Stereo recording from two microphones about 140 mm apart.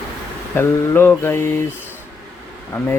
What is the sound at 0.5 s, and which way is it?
Speech, 15° left (ahead or behind).